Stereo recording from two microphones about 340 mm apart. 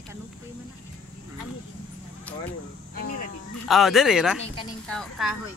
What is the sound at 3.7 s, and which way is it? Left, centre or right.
Speech, centre.